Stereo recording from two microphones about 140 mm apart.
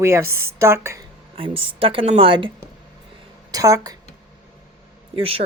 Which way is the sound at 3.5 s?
25° right (ahead or behind).